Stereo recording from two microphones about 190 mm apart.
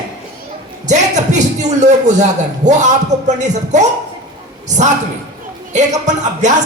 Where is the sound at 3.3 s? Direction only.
40° right (ahead or behind).